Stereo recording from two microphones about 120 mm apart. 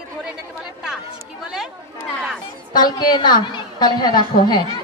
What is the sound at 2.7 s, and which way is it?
A woman's voice, 35° left (ahead or behind).